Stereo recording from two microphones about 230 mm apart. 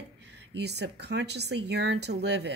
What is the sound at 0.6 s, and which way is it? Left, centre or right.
A woman's voice, right.